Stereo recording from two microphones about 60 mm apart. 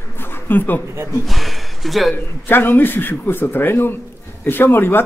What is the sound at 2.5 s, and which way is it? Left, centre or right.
Speech, left.